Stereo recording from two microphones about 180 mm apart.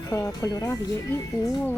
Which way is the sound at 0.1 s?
20° left (ahead or behind).